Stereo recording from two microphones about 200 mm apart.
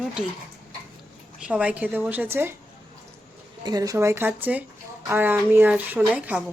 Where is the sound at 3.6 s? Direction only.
20° right (ahead or behind).